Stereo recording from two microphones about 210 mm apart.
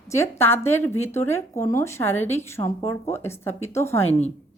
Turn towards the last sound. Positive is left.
turn(degrees=30)  # may be behind; listen again after turning